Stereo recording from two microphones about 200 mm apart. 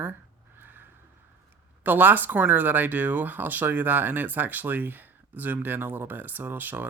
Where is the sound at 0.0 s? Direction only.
10° right (ahead or behind).